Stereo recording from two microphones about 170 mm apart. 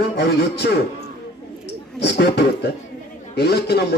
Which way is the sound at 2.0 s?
85° left.